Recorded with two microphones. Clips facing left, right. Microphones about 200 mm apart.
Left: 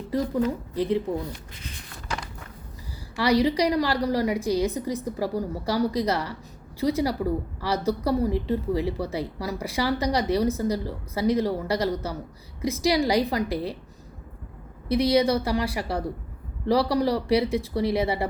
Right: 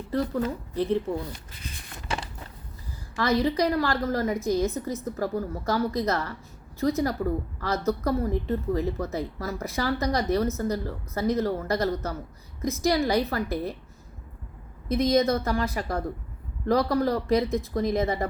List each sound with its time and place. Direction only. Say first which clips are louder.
0.1 s a woman's voice: left 2 dB; 10° left (ahead or behind)
2.0 s walk: right 1 dB; 25° right (ahead or behind)
3.2 s a woman's voice: left 2 dB; 15° left (ahead or behind)
15.1 s a woman's voice: even; 10° left (ahead or behind)